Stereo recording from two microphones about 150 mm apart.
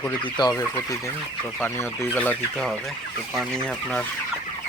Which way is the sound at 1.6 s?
15° left (ahead or behind).